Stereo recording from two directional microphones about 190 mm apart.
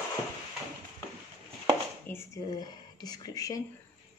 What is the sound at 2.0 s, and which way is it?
Speech, 15° left (ahead or behind).